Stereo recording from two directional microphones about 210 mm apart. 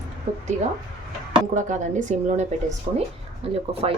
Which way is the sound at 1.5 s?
35° right (ahead or behind).